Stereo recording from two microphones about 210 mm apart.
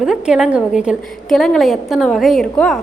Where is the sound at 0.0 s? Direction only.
5° right (ahead or behind).